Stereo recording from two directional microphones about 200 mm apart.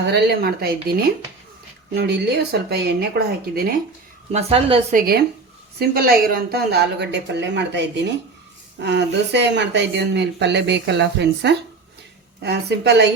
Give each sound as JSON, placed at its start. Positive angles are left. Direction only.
{"t": 0.1, "sound": "speech", "side_deg": -55}
{"t": 2.0, "sound": "speech", "side_deg": -55}
{"t": 4.3, "sound": "a woman's voice", "side_deg": -30}
{"t": 4.9, "sound": "speech", "side_deg": -50}